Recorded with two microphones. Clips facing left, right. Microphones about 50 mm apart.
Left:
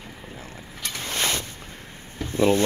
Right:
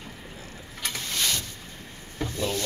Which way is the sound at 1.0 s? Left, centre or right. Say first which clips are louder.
Left 4 dB; left.